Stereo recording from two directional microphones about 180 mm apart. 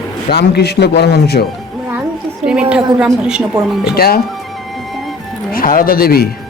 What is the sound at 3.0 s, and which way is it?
Speech, 5° right (ahead or behind).